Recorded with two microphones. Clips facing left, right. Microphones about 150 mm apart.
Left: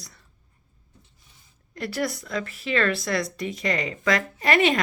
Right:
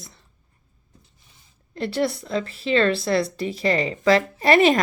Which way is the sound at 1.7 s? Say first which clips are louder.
Right 4 dB; 30° right (ahead or behind).